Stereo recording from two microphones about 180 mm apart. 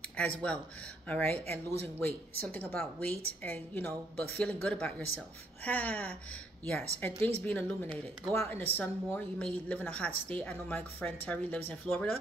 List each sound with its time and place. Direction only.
0.2 s speech: 5° left (ahead or behind)